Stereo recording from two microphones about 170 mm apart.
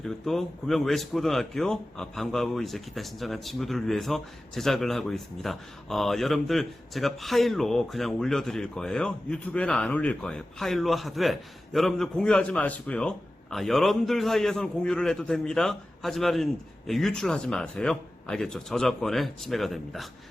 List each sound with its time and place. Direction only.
0.0 s speech: centre (ahead or behind)